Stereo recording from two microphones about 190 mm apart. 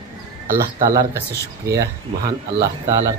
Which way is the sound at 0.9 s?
15° right (ahead or behind).